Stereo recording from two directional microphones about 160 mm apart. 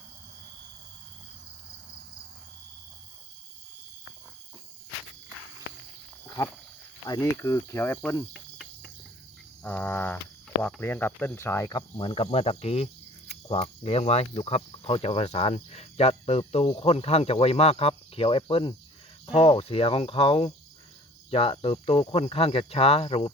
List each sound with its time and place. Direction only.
6.2 s cricket: 20° left (ahead or behind)
7.0 s speech: 20° left (ahead or behind)
8.3 s cricket: centre (ahead or behind)
9.6 s speech: 10° left (ahead or behind); by 23.3 s 35° left (ahead or behind)